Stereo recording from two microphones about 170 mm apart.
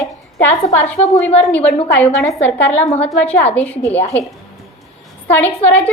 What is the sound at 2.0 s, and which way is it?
A woman's voice, 10° left (ahead or behind).